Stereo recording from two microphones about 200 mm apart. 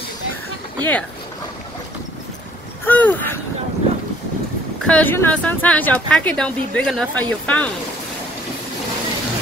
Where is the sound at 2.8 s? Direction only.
10° left (ahead or behind).